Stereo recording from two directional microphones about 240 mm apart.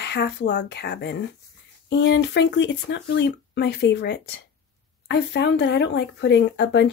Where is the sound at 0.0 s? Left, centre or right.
Left.